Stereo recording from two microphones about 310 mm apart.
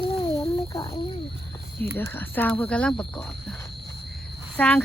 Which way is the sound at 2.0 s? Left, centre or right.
Centre.